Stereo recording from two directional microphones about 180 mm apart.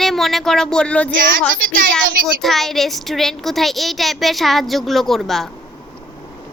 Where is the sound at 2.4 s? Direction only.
Centre (ahead or behind).